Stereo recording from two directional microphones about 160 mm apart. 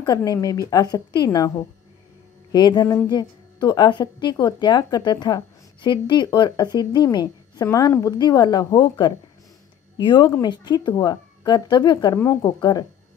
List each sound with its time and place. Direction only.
0.0 s a woman's voice: 25° left (ahead or behind)
2.5 s a woman's voice: 25° left (ahead or behind)
12.2 s speech: 15° left (ahead or behind)